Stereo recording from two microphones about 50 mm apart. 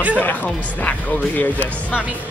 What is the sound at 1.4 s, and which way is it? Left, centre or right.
Speech, left.